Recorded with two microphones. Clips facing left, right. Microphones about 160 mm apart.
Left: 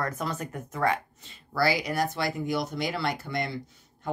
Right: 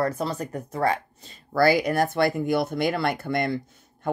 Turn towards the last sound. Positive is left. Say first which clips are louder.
# right 6 dB
turn(degrees=-55)  # may be behind; listen again after turning